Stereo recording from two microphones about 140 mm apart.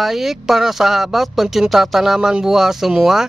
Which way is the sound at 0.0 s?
Centre (ahead or behind).